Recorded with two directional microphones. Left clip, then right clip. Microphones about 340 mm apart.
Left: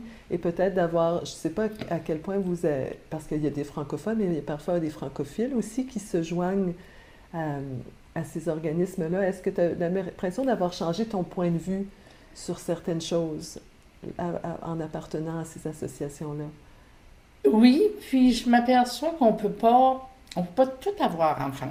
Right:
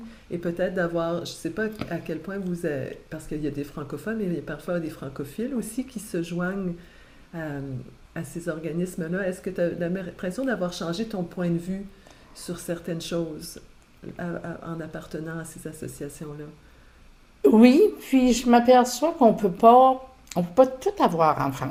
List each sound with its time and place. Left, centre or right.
0.3 s speech: left
8.1 s speech: left
17.4 s a woman's voice: right